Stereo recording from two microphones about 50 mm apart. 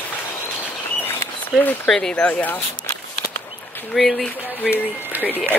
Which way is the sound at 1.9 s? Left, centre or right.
Centre.